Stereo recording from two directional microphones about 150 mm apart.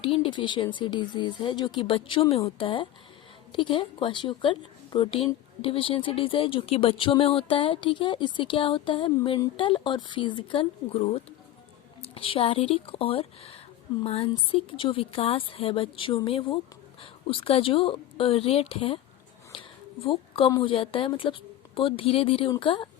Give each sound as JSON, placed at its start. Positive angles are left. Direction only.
{"t": 0.0, "sound": "speech", "side_deg": 35}
{"t": 19.5, "sound": "a sound", "side_deg": 35}
{"t": 20.1, "sound": "a woman's voice", "side_deg": 35}